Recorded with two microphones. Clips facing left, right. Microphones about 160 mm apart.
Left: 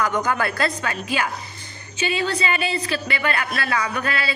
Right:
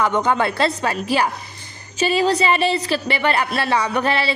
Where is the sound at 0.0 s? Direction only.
25° right (ahead or behind).